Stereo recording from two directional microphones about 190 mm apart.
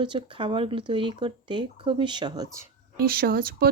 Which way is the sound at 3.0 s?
50° right (ahead or behind).